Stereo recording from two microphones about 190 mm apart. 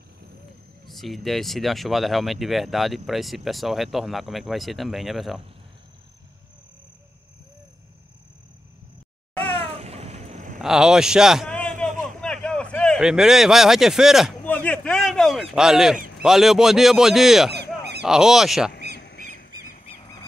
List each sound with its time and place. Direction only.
0.8 s speech: centre (ahead or behind)
9.4 s cat: 30° right (ahead or behind)
10.6 s speech: 5° right (ahead or behind)
11.4 s a sound: 5° left (ahead or behind)
14.4 s honk: 10° left (ahead or behind)
16.2 s speech: centre (ahead or behind)
17.5 s honk: 60° right (ahead or behind)
18.0 s speech: 5° right (ahead or behind)
18.9 s a sound: 65° left (ahead or behind)